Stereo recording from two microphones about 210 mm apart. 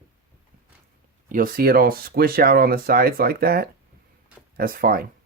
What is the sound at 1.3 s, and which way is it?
Speech, 40° right (ahead or behind).